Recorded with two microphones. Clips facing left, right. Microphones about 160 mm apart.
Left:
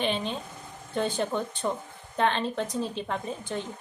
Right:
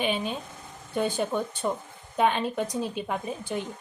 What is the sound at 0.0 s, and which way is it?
Speech, 10° right (ahead or behind).